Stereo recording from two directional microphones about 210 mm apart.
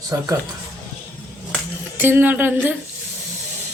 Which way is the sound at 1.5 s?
10° right (ahead or behind).